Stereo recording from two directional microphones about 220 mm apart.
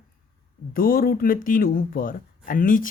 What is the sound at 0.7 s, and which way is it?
A woman's voice, 40° left (ahead or behind).